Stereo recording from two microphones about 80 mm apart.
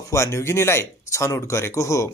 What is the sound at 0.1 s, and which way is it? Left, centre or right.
Speech, left.